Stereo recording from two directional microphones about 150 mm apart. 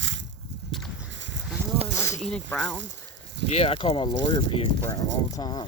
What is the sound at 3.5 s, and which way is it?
Speech, 40° left (ahead or behind).